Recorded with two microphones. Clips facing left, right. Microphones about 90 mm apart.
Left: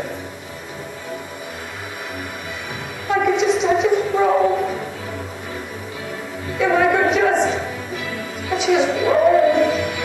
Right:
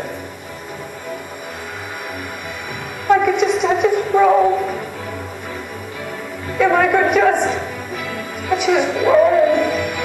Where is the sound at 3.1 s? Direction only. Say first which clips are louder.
Right 3 dB; 55° right (ahead or behind).